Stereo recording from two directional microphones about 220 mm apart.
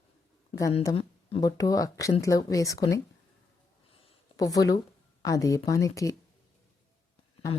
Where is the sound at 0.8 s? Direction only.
20° left (ahead or behind).